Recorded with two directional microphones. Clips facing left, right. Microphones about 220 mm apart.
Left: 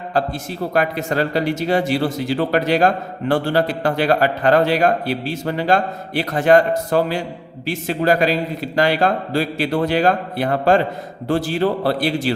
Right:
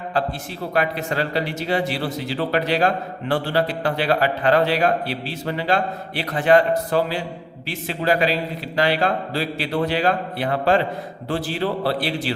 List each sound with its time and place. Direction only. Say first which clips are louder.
0.7 s speech: left 2 dB; 45° left (ahead or behind)